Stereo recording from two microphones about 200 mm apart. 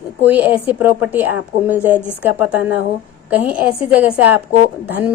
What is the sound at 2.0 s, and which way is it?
Speech, 10° left (ahead or behind).